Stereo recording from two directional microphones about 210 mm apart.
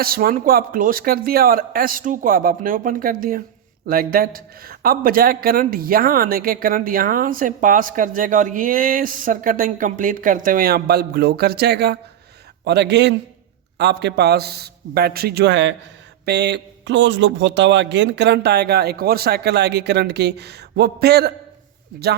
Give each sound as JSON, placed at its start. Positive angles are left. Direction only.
{"t": 0.0, "sound": "speech", "side_deg": -45}